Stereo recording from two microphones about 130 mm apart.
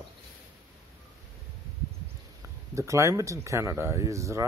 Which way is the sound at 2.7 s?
25° right (ahead or behind).